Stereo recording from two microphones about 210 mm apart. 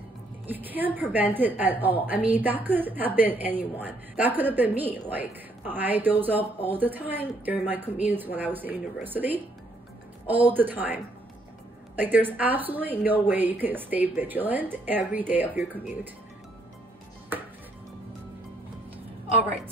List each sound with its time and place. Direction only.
0.5 s a woman's voice: 10° right (ahead or behind)
12.0 s a woman's voice: 10° right (ahead or behind)
17.3 s music: 10° right (ahead or behind)